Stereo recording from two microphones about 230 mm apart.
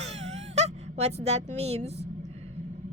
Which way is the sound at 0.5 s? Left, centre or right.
Right.